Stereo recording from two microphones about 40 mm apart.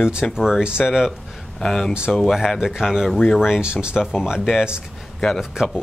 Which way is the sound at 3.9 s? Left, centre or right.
Centre.